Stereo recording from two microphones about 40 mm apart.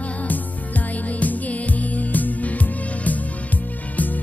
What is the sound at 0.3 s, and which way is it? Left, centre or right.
Music, left.